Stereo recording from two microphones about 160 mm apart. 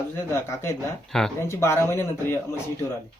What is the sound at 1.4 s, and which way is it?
Speech, 15° left (ahead or behind).